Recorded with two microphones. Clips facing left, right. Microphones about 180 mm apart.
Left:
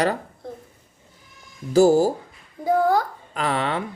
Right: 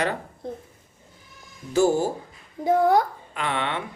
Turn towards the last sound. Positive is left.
turn(degrees=35)  # may be behind; listen again after turning